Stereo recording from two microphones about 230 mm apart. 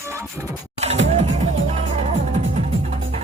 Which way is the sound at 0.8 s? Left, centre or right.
Right.